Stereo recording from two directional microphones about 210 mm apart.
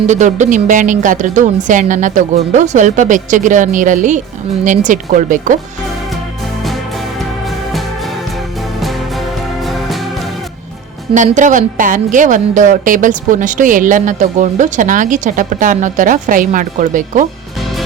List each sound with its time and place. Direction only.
0.1 s a woman's voice: 35° right (ahead or behind)
8.8 s music: centre (ahead or behind)
11.1 s a woman's voice: 35° right (ahead or behind)